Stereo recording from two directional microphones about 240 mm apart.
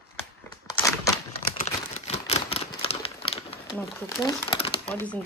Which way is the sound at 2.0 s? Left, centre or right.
Left.